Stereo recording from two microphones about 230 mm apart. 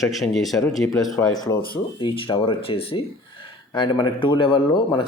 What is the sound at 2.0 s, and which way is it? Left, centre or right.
Speech, left.